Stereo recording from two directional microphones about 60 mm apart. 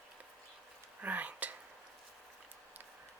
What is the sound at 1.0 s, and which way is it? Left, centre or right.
Speech, right.